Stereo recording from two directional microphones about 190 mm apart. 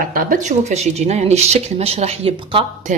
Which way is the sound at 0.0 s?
45° right (ahead or behind).